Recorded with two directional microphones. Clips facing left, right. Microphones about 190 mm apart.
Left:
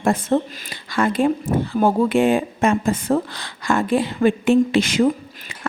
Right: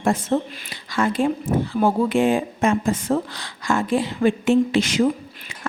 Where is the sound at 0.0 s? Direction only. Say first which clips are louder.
Left 2 dB; 55° left (ahead or behind).